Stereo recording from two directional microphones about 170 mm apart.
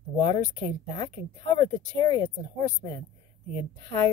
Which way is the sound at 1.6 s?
25° left (ahead or behind).